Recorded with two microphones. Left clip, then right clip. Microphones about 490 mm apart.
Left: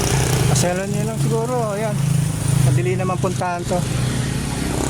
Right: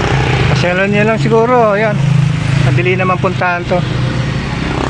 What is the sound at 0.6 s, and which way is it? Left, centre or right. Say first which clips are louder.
Speech: right 10 dB; left.